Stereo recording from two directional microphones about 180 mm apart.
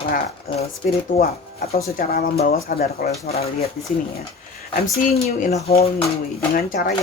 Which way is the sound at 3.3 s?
35° left (ahead or behind).